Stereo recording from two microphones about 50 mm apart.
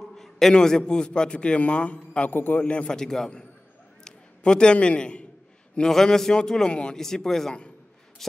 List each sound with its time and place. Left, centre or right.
0.1 s a man's voice: centre; by 2.3 s left
2.3 s a man's voice: left
2.6 s a man's voice: left
2.9 s a man's voice: centre
8.2 s a sound: centre